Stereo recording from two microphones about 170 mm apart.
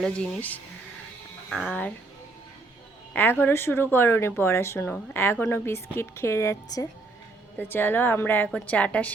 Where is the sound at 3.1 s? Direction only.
10° left (ahead or behind).